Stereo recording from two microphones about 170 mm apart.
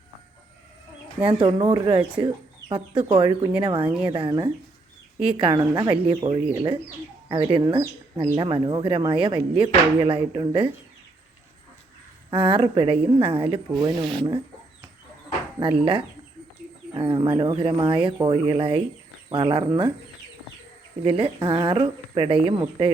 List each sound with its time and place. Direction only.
1.3 s speech: 30° right (ahead or behind)
5.5 s speech: 20° right (ahead or behind)
5.9 s speech: 30° right (ahead or behind)
12.3 s speech: 30° right (ahead or behind)
21.0 s speech: 35° right (ahead or behind)